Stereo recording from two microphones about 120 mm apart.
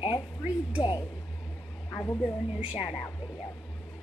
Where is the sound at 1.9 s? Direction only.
20° left (ahead or behind).